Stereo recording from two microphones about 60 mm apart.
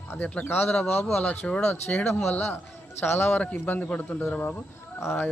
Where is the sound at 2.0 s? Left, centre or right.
Left.